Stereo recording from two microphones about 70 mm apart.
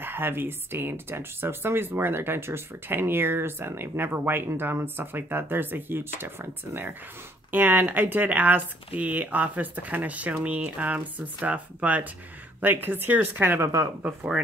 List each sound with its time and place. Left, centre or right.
0.0 s speech: right